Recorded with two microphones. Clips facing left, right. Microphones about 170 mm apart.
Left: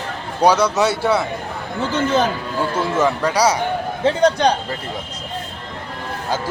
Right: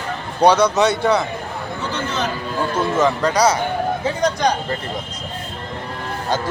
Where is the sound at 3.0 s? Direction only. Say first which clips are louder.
Right 1 dB; 10° left (ahead or behind).